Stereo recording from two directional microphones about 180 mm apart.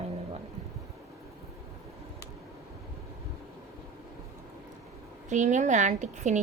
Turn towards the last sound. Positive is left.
turn(degrees=-40)  # may be behind; listen again after turning